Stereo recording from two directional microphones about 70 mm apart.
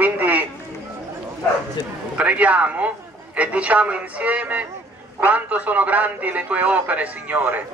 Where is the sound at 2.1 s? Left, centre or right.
Centre.